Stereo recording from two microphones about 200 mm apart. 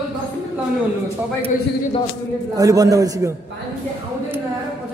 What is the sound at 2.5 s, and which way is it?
Speech, 15° right (ahead or behind).